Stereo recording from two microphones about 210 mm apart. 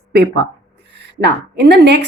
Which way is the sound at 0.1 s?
50° right (ahead or behind).